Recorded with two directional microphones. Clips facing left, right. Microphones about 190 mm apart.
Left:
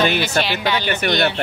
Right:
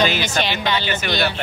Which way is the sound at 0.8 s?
55° left (ahead or behind).